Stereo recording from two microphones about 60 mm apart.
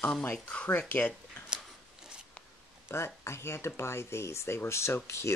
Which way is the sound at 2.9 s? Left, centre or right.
Left.